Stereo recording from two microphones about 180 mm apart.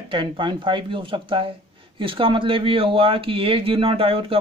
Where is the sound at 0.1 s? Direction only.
25° right (ahead or behind).